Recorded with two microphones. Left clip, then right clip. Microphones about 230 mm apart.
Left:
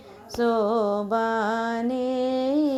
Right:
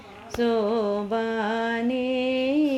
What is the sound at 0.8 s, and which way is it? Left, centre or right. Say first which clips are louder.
Mantra: left 1 dB; centre.